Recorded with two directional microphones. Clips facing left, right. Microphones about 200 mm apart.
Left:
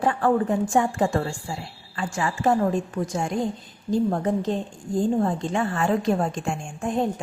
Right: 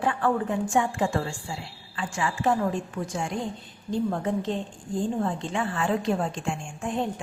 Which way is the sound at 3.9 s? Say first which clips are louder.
Left 4 dB; 40° left (ahead or behind).